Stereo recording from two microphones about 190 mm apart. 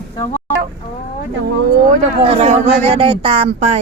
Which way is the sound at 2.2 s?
30° right (ahead or behind).